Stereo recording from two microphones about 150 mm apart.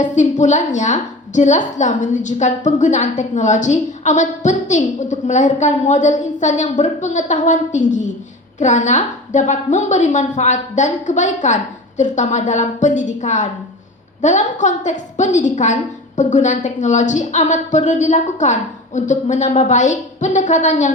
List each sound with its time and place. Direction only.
0.0 s a woman's voice: 55° left (ahead or behind)